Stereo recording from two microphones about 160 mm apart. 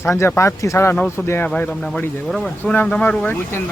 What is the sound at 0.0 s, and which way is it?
Speech, 15° left (ahead or behind).